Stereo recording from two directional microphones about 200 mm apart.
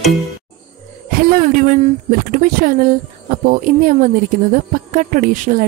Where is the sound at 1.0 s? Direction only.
45° right (ahead or behind).